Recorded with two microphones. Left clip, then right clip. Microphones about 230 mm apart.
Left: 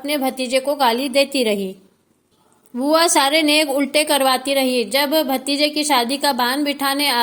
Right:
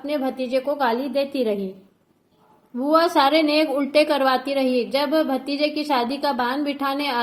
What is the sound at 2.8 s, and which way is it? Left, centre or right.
A woman's voice, left.